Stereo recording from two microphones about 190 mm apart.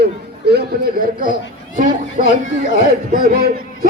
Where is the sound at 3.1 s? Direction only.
50° right (ahead or behind).